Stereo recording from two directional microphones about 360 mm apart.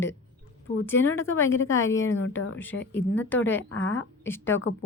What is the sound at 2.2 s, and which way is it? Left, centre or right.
Speech, left.